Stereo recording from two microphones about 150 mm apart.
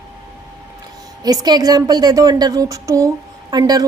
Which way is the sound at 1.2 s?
25° right (ahead or behind).